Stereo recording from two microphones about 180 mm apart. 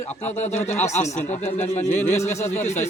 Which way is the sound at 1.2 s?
40° left (ahead or behind).